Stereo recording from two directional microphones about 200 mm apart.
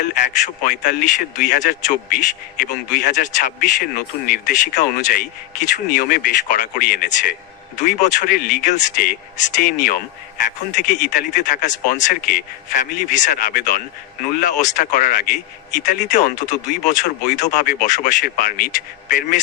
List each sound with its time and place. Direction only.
0.0 s speech: 40° left (ahead or behind)
12.8 s speech: 40° left (ahead or behind)